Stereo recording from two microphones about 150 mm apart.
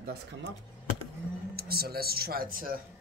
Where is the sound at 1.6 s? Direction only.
90° right; by 2.8 s 70° right (ahead or behind).